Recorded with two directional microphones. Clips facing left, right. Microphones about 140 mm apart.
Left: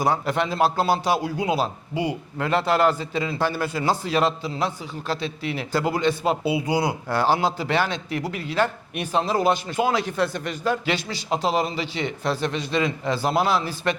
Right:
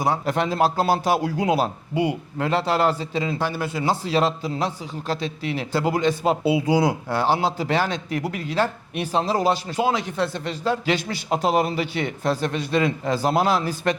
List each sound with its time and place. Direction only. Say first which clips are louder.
0.3 s a man's voice: right 1 dB; 40° right (ahead or behind)
1.2 s speech: right 2 dB; 90° right
1.5 s speech: right 3 dB; 55° right (ahead or behind)
2.4 s speech: left 1 dB; 35° right (ahead or behind)
3.3 s speech: left 1 dB; 15° right (ahead or behind)
4.0 s speech: right 1 dB; 35° right (ahead or behind)
6.4 s speech: right 3 dB; 90° right
7.1 s speech: even; 20° right (ahead or behind)
9.9 s speech: left 1 dB; 25° right (ahead or behind)
10.8 s a man's voice: right 2 dB; 45° right (ahead or behind)